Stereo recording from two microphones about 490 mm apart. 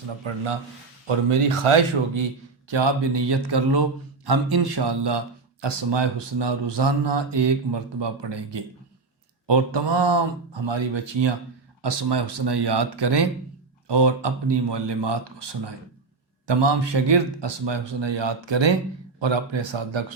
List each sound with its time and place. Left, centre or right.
0.2 s speech: right
1.0 s speech: right
2.6 s speech: right